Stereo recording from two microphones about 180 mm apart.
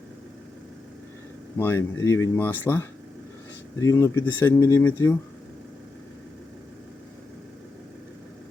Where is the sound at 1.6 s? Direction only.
15° left (ahead or behind).